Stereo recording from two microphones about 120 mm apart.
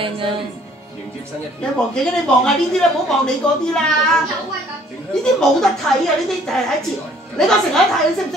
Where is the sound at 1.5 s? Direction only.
5° left (ahead or behind).